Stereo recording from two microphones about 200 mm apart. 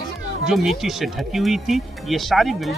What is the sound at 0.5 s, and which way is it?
Speech, centre (ahead or behind).